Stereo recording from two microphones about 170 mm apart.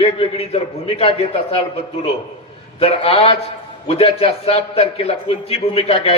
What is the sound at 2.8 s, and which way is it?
A man's voice, 35° left (ahead or behind).